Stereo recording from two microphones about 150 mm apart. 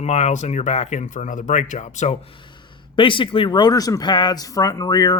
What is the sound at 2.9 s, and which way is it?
Speech, 35° left (ahead or behind).